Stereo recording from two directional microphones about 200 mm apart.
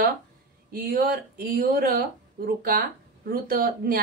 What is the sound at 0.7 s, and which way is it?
A woman's voice, 45° right (ahead or behind).